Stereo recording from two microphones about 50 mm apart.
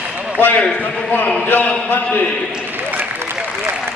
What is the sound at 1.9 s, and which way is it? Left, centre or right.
Speech, left.